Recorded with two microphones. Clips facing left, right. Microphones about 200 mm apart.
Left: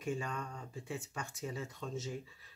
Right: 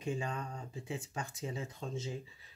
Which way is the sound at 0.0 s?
25° right (ahead or behind).